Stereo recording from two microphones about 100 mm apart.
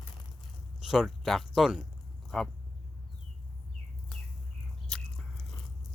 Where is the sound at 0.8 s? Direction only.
5° right (ahead or behind).